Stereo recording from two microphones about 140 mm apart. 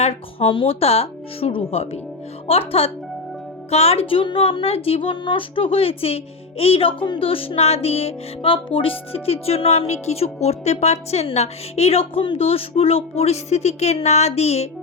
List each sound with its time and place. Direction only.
0.0 s speech: 45° left (ahead or behind)